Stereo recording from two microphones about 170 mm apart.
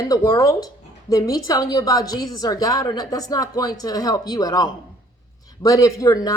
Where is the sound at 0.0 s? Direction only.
20° left (ahead or behind).